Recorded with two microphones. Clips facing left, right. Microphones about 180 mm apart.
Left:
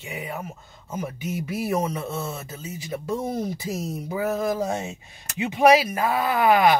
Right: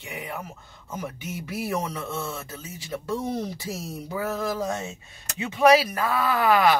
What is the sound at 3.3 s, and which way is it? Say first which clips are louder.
Speech: left 2 dB; 5° left (ahead or behind).